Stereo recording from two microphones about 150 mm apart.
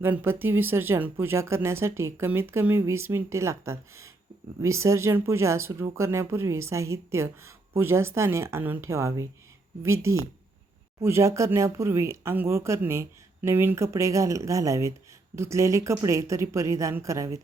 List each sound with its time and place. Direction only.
0.0 s speech: 15° right (ahead or behind)